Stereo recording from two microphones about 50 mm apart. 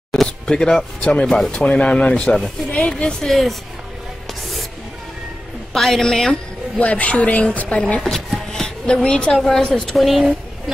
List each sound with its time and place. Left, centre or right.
0.1 s a woman's voice: centre
2.1 s a woman's voice: centre
3.3 s speech: centre
4.3 s music: centre
5.7 s a woman's voice: centre
6.8 s a woman's voice: left
8.0 s speech: centre
9.3 s a woman's voice: centre
9.9 s speech: centre